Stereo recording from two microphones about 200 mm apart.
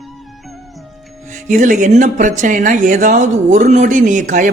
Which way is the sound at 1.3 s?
40° right (ahead or behind).